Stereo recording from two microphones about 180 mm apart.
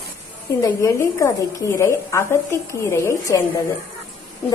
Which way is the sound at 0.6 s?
15° left (ahead or behind).